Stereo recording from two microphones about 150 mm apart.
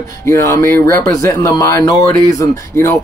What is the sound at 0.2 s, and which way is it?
Speech, 20° left (ahead or behind).